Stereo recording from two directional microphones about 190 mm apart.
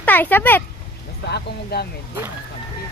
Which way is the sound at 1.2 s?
60° left (ahead or behind).